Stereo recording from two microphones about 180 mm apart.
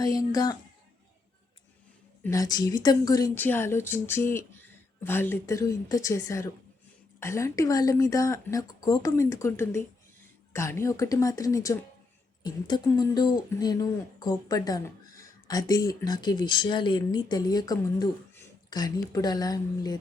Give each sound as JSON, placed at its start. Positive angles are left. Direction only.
{"t": 0.0, "sound": "speech", "side_deg": 20}
{"t": 2.2, "sound": "speech", "side_deg": 20}